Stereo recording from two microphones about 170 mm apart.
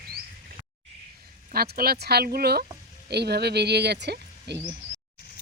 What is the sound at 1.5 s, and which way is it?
Speech, 65° right (ahead or behind).